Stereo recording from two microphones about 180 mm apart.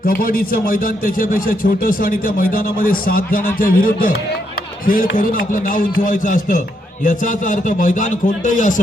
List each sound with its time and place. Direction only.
0.0 s a man's voice: 55° left (ahead or behind)
5.1 s a man's voice: 50° left (ahead or behind)